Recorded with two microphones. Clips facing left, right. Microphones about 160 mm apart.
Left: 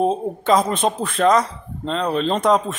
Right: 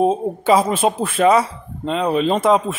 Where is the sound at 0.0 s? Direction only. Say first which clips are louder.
Right 3 dB; 5° right (ahead or behind).